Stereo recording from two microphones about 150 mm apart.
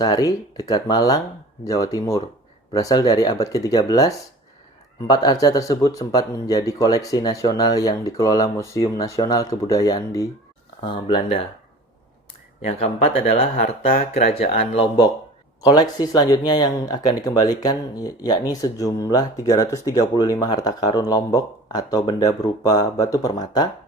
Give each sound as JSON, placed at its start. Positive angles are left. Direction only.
{"t": 0.0, "sound": "speech", "side_deg": 25}
{"t": 10.8, "sound": "speech", "side_deg": 35}
{"t": 12.6, "sound": "speech", "side_deg": 45}